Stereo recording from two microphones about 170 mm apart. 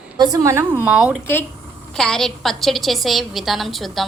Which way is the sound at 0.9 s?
5° right (ahead or behind).